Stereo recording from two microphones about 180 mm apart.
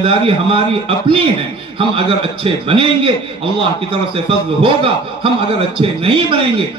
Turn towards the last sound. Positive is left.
turn(degrees=-30)  # may be behind; listen again after turning